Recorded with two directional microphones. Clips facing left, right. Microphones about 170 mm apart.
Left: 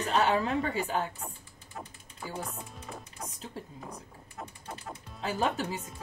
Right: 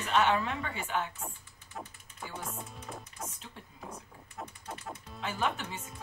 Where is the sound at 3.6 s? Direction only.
35° left (ahead or behind).